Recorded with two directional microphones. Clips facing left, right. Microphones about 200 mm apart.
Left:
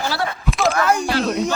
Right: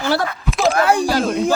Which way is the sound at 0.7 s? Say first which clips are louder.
Right 3 dB; 30° right (ahead or behind).